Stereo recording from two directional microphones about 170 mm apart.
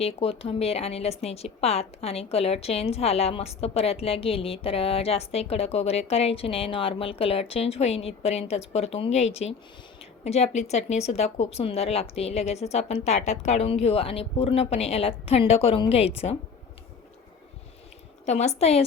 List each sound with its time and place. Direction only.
0.0 s speech: 35° left (ahead or behind)
18.3 s speech: 40° left (ahead or behind)